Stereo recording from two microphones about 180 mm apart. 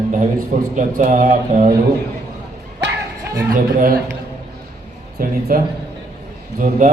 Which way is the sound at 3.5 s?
50° right (ahead or behind).